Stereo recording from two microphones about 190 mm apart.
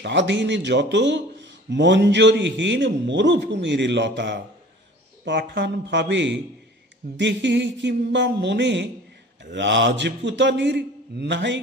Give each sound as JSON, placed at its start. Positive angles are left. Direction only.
{"t": 0.0, "sound": "a man's voice", "side_deg": -70}